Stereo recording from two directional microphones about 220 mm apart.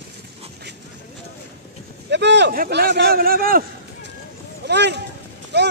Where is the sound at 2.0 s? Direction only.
50° right (ahead or behind).